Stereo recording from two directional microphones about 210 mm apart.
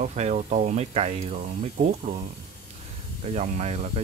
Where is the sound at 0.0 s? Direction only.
30° right (ahead or behind).